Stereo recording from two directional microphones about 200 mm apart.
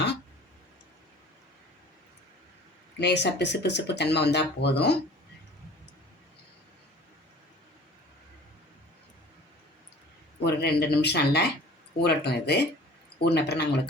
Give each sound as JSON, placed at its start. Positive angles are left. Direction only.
{"t": 3.0, "sound": "speech", "side_deg": 60}
{"t": 10.4, "sound": "speech", "side_deg": 55}